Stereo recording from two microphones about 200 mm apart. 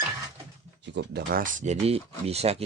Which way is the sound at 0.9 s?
55° right (ahead or behind).